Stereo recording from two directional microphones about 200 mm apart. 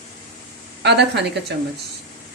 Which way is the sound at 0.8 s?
60° right (ahead or behind).